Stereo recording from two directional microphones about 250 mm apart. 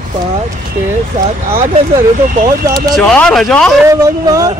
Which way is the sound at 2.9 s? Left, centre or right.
Centre.